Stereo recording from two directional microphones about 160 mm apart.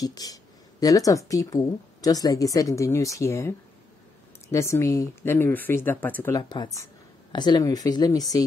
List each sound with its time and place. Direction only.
0.0 s speech: 25° left (ahead or behind)
6.3 s speech: 25° left (ahead or behind)